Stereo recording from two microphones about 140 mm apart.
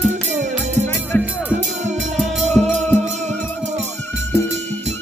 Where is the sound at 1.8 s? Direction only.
55° right (ahead or behind).